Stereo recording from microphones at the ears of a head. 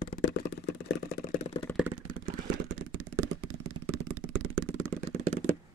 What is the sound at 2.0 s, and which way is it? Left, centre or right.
Vehicle, right.